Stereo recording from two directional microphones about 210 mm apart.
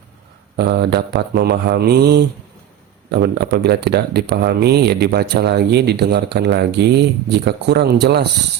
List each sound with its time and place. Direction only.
0.5 s speech: 55° right (ahead or behind)